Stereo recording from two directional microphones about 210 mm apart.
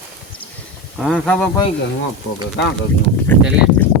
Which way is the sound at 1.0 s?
Centre (ahead or behind).